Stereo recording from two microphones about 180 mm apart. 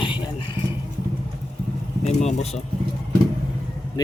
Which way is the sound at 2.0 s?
35° left (ahead or behind).